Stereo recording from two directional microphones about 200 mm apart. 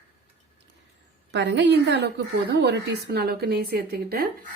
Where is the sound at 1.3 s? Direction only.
60° right (ahead or behind).